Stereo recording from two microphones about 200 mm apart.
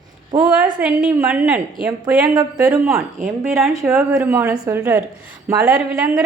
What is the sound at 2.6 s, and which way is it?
Speech, 15° right (ahead or behind).